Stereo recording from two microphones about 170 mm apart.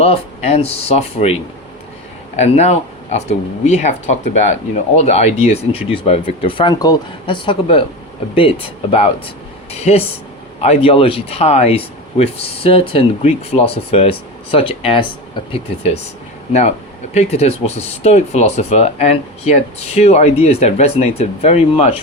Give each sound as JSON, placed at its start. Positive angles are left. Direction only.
{"t": 0.0, "sound": "speech", "side_deg": 35}
{"t": 17.2, "sound": "speech", "side_deg": 40}